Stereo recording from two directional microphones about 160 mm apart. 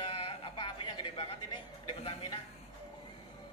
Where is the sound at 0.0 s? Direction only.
30° left (ahead or behind).